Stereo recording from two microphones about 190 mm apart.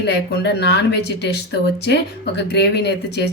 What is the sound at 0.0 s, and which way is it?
Speech, 65° left (ahead or behind).